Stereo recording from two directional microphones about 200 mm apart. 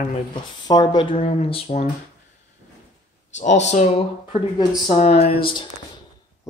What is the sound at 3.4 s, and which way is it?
Speech, 35° left (ahead or behind).